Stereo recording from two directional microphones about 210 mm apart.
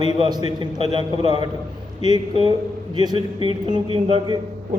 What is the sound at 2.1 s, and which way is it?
A man's voice, 20° right (ahead or behind).